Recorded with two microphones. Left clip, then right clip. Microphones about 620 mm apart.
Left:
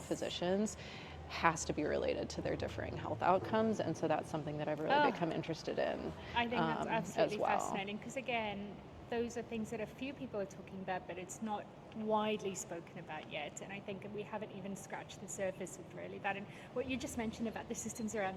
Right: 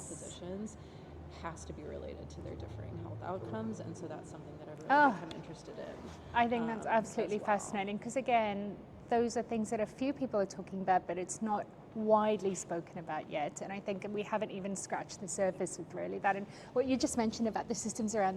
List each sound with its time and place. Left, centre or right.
0.3 s a woman's voice: left
5.6 s a woman's voice: left
6.3 s a woman's voice: right
12.1 s a woman's voice: right